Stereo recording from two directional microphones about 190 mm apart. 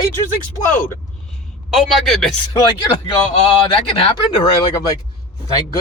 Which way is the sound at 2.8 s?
30° left (ahead or behind).